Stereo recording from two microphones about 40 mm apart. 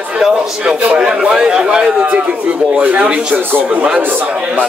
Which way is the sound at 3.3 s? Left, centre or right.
Right.